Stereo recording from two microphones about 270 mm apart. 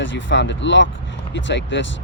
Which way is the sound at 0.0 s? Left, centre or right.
Left.